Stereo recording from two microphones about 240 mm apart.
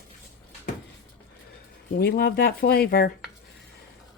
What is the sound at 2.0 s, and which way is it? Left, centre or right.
Speech, left.